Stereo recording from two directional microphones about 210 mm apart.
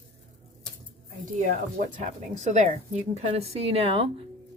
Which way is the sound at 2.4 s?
35° right (ahead or behind).